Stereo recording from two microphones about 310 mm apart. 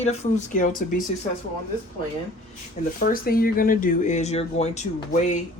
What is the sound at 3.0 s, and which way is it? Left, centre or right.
Speech, left.